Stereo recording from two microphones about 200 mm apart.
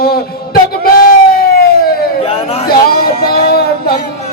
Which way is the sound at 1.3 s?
50° left (ahead or behind).